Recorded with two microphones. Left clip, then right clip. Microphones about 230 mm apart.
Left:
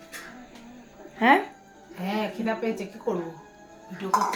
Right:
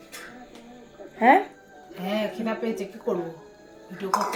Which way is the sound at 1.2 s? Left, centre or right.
Centre.